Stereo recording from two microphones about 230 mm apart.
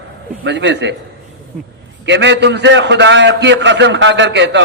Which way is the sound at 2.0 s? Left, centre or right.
Right.